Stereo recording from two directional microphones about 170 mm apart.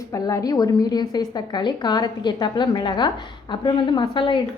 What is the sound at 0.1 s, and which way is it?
A woman's voice, 20° left (ahead or behind).